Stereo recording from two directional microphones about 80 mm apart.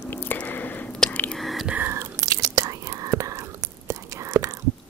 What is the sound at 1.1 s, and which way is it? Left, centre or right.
Whispering, centre.